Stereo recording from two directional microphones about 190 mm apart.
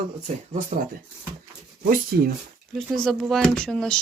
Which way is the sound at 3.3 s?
5° left (ahead or behind).